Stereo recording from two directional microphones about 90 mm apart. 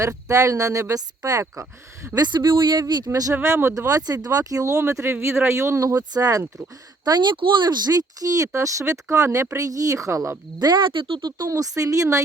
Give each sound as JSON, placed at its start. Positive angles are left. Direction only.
{"t": 0.0, "sound": "speech", "side_deg": -35}
{"t": 2.1, "sound": "speech", "side_deg": -55}
{"t": 3.1, "sound": "speech", "side_deg": -40}
{"t": 7.0, "sound": "speech", "side_deg": -55}
{"t": 10.6, "sound": "speech", "side_deg": -55}
{"t": 11.3, "sound": "speech", "side_deg": -40}